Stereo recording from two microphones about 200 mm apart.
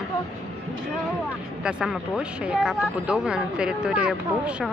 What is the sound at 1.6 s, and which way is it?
Speech, 5° right (ahead or behind).